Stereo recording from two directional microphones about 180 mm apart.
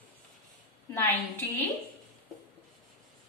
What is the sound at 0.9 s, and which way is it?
Speech, 10° left (ahead or behind).